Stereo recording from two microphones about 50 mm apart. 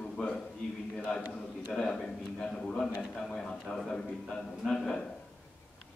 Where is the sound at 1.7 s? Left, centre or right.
Centre.